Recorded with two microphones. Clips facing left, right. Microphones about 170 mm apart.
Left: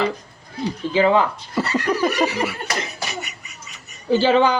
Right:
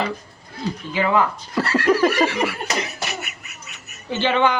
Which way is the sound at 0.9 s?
25° left (ahead or behind).